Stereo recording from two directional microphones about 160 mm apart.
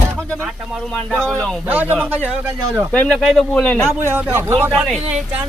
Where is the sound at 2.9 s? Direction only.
10° left (ahead or behind).